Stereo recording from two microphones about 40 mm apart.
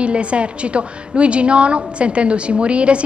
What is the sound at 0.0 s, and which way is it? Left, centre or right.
A woman's voice, right.